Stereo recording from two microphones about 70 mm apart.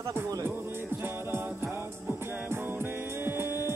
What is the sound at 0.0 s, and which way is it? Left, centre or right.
Music, right.